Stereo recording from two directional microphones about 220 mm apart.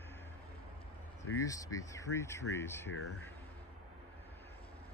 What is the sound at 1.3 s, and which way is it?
Speech, 15° left (ahead or behind).